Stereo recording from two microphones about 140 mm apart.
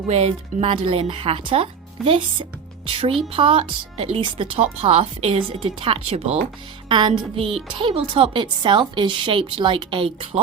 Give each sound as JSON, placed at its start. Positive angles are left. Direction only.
{"t": 0.1, "sound": "a woman's voice", "side_deg": -50}
{"t": 6.8, "sound": "music", "side_deg": -35}
{"t": 7.1, "sound": "a woman's voice", "side_deg": -45}